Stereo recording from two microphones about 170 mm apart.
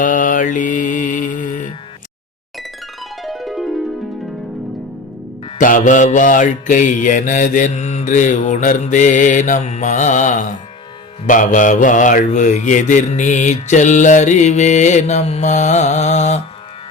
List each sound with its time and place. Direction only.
0.0 s music: 50° left (ahead or behind)
3.2 s music: centre (ahead or behind)
5.5 s mantra: 50° left (ahead or behind)